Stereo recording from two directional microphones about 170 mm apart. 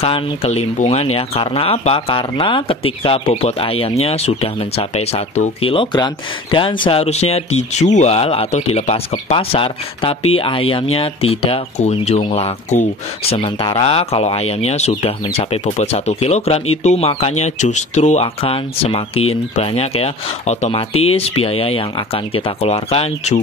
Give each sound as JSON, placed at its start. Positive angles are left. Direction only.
{"t": 0.0, "sound": "speech", "side_deg": 35}